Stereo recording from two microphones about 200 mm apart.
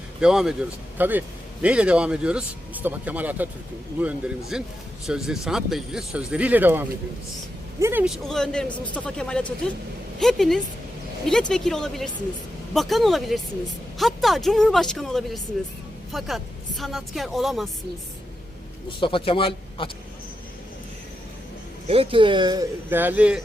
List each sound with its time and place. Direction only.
0.2 s speech: 5° right (ahead or behind)
8.3 s speech: 5° left (ahead or behind)
18.9 s speech: 25° left (ahead or behind)
21.8 s speech: 30° right (ahead or behind); by 23.4 s 5° right (ahead or behind)